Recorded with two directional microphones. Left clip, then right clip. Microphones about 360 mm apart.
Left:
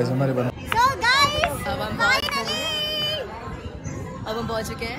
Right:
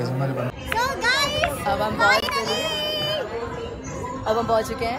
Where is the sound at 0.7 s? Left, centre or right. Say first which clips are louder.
Left 3 dB; centre.